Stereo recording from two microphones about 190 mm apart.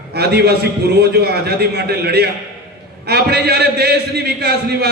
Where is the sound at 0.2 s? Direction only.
55° right (ahead or behind).